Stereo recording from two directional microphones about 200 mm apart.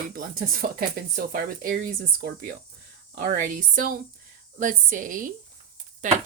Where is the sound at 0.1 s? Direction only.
45° right (ahead or behind).